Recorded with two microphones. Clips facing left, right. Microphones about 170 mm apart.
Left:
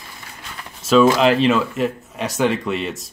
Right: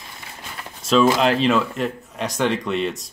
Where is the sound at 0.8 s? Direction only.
Centre (ahead or behind).